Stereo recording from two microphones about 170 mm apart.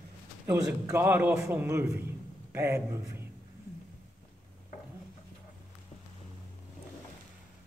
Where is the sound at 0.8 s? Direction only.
10° right (ahead or behind).